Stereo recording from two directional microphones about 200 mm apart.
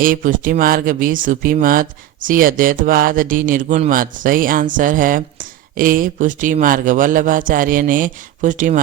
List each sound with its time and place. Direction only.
0.0 s speech: 45° right (ahead or behind)